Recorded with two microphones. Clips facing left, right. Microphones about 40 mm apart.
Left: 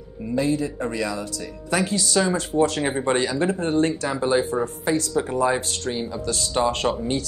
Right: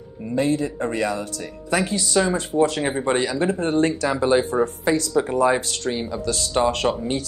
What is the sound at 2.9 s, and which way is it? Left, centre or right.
Speech, centre.